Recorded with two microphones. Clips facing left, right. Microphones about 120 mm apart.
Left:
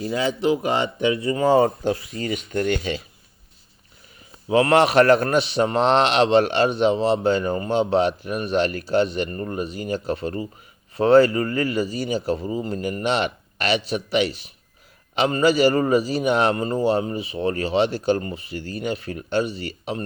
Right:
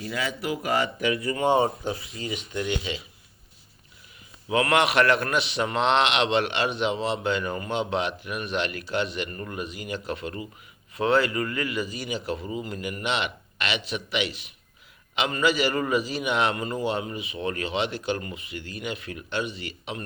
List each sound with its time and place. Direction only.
0.0 s speech: 30° left (ahead or behind)
1.6 s speech: 60° left (ahead or behind)
4.4 s a man's voice: 35° left (ahead or behind)